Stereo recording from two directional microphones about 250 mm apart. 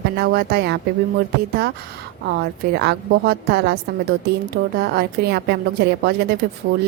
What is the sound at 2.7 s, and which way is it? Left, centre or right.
A woman's voice, right.